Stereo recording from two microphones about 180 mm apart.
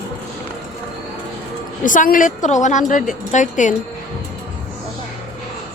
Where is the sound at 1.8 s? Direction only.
45° left (ahead or behind).